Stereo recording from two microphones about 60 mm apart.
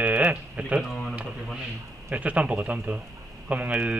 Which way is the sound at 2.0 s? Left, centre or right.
Right.